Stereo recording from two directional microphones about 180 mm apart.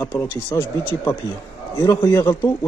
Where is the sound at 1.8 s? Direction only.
20° left (ahead or behind).